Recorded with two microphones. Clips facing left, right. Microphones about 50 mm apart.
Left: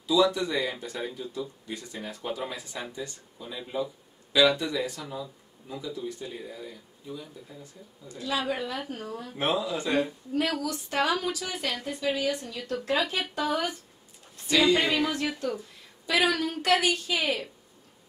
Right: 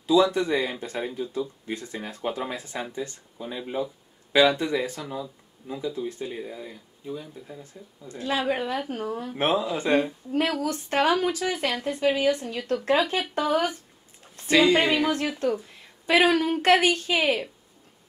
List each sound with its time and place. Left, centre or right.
0.0 s speech: right
5.0 s speech: centre; by 6.8 s right
8.1 s a woman's voice: right